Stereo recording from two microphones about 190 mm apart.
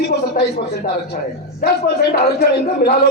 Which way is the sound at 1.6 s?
50° left (ahead or behind).